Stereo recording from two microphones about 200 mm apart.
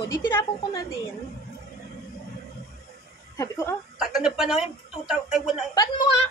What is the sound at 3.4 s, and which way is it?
Speech, 15° left (ahead or behind).